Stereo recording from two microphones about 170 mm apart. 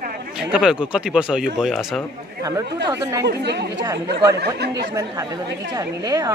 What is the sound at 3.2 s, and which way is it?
Speech, 80° right.